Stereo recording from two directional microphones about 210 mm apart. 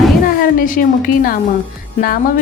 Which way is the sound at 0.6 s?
40° left (ahead or behind).